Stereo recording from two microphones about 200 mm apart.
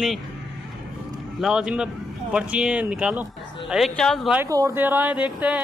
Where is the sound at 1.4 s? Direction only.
5° right (ahead or behind).